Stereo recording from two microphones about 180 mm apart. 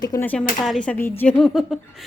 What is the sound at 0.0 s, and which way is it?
Speech, 20° left (ahead or behind).